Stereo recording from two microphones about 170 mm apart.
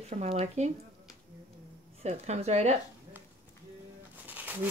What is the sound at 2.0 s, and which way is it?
Speech, 40° right (ahead or behind).